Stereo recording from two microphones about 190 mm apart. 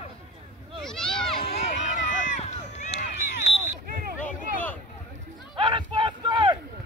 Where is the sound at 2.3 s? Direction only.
40° left (ahead or behind).